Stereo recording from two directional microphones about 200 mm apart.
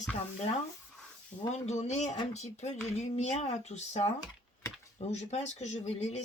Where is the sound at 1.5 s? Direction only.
35° left (ahead or behind).